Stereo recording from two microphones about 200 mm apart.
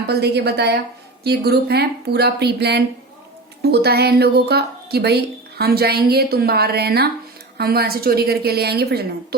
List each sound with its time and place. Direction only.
0.1 s a woman's voice: 55° right (ahead or behind)